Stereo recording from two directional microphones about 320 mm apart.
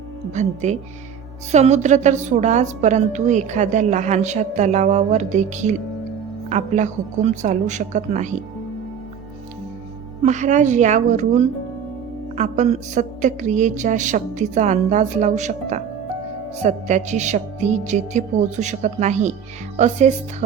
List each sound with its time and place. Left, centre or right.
0.3 s a woman's voice: right
10.2 s a woman's voice: right